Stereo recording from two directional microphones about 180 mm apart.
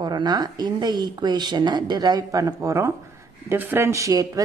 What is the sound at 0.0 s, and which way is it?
A woman's voice, 25° right (ahead or behind).